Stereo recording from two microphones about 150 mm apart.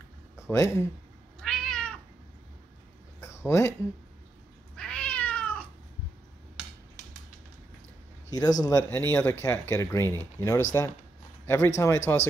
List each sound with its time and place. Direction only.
0.5 s speech: 15° left (ahead or behind)
1.4 s cat: 5° left (ahead or behind)
3.2 s a sound: 20° left (ahead or behind)
4.7 s cat: 5° left (ahead or behind)
8.3 s a man's voice: 25° left (ahead or behind)